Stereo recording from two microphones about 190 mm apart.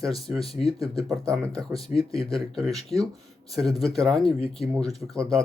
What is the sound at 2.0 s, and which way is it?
Speech, 20° right (ahead or behind).